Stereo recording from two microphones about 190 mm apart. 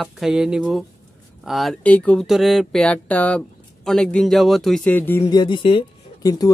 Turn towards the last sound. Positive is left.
turn(degrees=20)  # may be behind; listen again after turning